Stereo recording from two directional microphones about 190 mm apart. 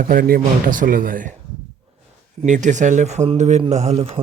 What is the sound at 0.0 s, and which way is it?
A man's voice, 45° right (ahead or behind).